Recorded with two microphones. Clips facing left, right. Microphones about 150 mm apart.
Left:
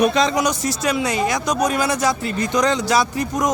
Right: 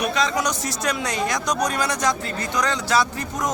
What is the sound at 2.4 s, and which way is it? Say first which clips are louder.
Speech: left 8 dB; 20° left (ahead or behind).